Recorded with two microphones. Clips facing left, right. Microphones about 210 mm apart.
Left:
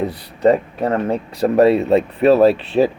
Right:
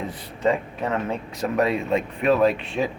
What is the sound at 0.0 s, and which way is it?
Speech, 35° left (ahead or behind).